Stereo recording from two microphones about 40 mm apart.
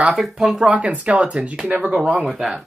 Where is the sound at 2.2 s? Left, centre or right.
Centre.